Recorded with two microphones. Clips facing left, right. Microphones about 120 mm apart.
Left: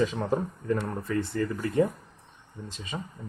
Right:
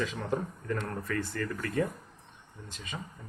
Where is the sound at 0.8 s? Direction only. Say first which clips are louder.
Left 4 dB; 15° left (ahead or behind).